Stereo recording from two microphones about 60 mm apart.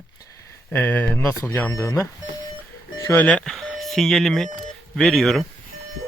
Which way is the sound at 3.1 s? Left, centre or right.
Left.